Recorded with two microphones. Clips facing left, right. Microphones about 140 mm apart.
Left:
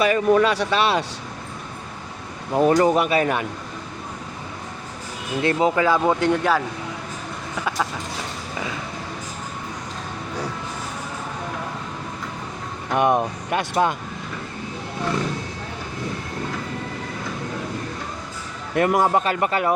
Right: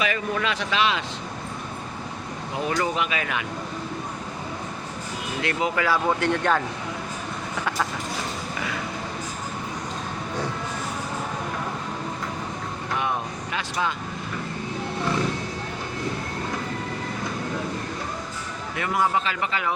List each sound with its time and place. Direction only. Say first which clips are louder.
0.1 s speech: left 9 dB; 40° left (ahead or behind)
2.6 s speech: left 9 dB; 45° left (ahead or behind)
5.4 s speech: left 6 dB; 30° left (ahead or behind)
5.8 s speech: left 4 dB; 20° left (ahead or behind)
13.0 s speech: left 11 dB; 55° left (ahead or behind)
18.7 s speech: left 6 dB; 50° left (ahead or behind)